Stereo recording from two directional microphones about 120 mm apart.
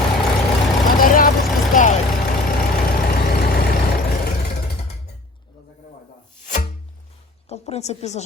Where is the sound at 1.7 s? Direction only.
90° left.